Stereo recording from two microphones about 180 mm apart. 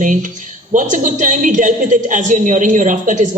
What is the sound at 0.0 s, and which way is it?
A woman's voice, 45° right (ahead or behind).